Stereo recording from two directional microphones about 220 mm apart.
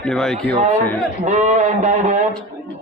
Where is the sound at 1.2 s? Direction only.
35° right (ahead or behind).